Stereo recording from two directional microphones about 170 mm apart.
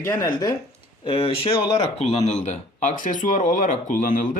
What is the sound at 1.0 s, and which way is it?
Speech, 35° left (ahead or behind).